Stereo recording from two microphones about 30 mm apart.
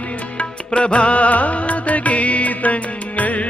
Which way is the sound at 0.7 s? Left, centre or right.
Left.